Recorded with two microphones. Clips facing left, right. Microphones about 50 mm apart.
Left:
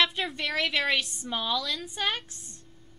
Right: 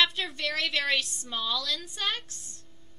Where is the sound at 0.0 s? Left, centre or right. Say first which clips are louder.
Even; centre.